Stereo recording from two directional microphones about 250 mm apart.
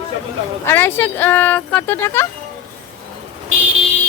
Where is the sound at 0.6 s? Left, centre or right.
Centre.